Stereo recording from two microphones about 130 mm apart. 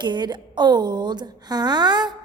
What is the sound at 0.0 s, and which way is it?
A woman's voice, 35° right (ahead or behind).